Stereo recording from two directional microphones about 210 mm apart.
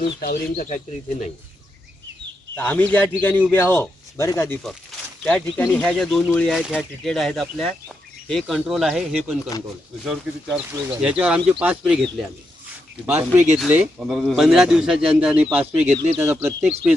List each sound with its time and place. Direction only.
0.5 s speech: 35° left (ahead or behind)
2.6 s speech: 10° left (ahead or behind); by 16.9 s 10° right (ahead or behind)